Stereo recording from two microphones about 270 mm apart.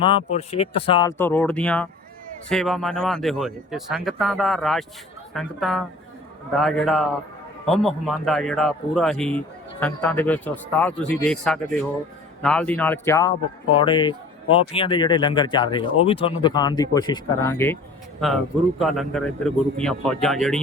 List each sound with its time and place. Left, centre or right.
0.0 s speech: left
18.8 s speech: centre